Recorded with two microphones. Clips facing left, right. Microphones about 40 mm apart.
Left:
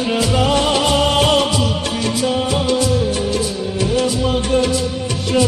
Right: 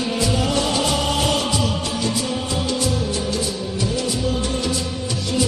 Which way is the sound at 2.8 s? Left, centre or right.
Left.